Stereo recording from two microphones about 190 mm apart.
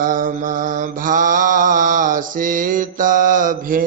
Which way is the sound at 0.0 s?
45° right (ahead or behind).